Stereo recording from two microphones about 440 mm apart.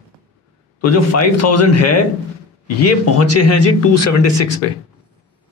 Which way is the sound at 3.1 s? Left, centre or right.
Left.